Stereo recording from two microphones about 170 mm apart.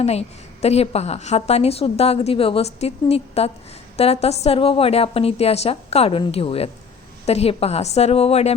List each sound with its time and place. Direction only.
0.0 s a woman's voice: 40° left (ahead or behind)